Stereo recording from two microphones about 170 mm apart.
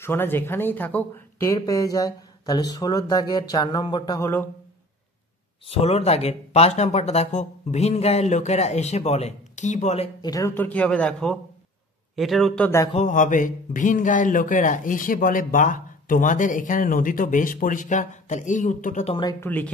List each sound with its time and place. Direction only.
0.0 s speech: 15° left (ahead or behind)
5.7 s speech: 40° left (ahead or behind)
10.2 s speech: 20° left (ahead or behind)
12.9 s a man's voice: 45° left (ahead or behind)
19.4 s speech: 10° left (ahead or behind)